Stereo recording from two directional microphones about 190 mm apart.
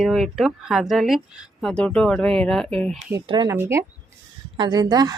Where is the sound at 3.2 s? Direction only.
25° right (ahead or behind).